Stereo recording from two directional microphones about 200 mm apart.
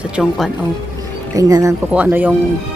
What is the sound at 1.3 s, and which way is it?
Speech, 15° right (ahead or behind).